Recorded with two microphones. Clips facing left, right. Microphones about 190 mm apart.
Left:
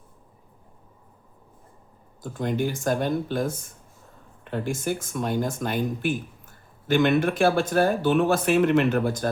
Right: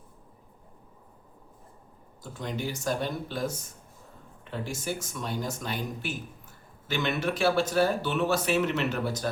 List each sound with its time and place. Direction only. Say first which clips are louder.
2.2 s speech: left 8 dB; 50° left (ahead or behind)